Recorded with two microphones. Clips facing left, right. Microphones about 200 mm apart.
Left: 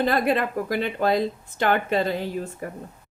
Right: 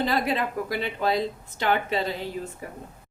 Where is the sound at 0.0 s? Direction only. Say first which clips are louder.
Left 3 dB; 50° left (ahead or behind).